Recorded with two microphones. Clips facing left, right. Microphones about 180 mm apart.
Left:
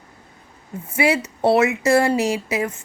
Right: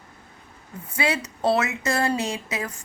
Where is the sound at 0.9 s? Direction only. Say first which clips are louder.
Left 6 dB; 25° left (ahead or behind).